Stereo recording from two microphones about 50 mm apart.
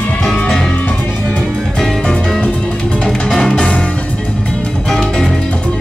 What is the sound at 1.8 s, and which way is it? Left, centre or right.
Music, centre.